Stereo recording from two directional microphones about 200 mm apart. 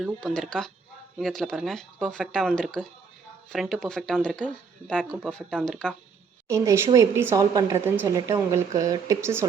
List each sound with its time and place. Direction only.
0.0 s speech: 5° left (ahead or behind)
6.5 s a woman's voice: 15° right (ahead or behind)